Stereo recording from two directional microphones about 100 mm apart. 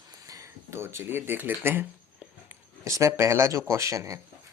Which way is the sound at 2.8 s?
30° right (ahead or behind).